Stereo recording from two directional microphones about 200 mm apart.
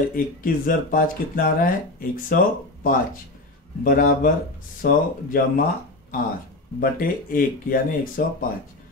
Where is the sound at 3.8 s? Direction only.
45° left (ahead or behind).